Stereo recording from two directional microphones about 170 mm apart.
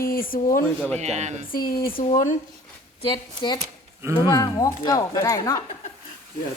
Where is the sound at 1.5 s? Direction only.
60° left (ahead or behind).